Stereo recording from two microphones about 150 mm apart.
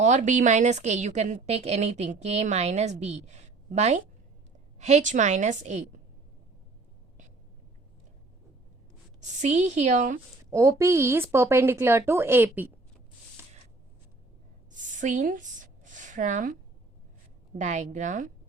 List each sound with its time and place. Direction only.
0.0 s a woman's voice: 55° right (ahead or behind)
9.2 s a woman's voice: 50° right (ahead or behind)
10.5 s speech: 20° right (ahead or behind)
14.7 s a sound: 55° right (ahead or behind)
17.6 s a woman's voice: 55° right (ahead or behind)